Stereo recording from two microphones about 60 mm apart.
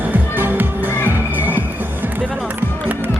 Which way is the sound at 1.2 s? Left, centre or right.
Right.